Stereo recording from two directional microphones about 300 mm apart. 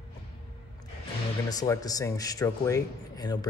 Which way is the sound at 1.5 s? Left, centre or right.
Centre.